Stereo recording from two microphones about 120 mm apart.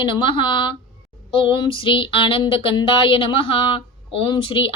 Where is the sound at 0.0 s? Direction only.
45° left (ahead or behind).